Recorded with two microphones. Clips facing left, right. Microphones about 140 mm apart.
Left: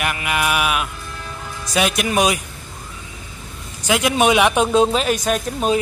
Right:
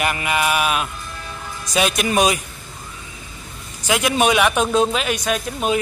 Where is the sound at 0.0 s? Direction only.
5° left (ahead or behind).